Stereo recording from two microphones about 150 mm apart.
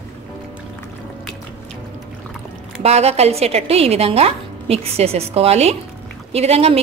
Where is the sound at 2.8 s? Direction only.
45° right (ahead or behind).